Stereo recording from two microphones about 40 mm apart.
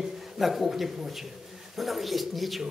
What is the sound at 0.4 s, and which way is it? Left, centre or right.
A man's voice, centre.